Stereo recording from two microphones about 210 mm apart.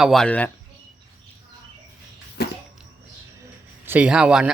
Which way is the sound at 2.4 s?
50° left (ahead or behind).